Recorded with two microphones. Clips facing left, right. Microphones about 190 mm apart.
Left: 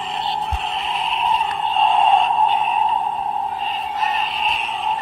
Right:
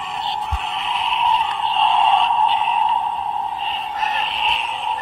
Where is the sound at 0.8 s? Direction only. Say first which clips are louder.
Right 2 dB; 40° left (ahead or behind).